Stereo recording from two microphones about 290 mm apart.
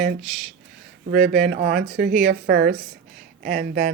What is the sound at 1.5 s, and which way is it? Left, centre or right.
Speech, right.